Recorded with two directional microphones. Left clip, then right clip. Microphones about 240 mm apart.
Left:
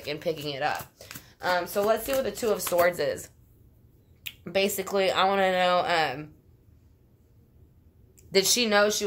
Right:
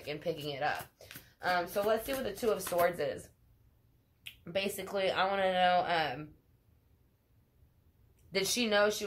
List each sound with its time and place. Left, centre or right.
0.0 s speech: left
8.3 s speech: left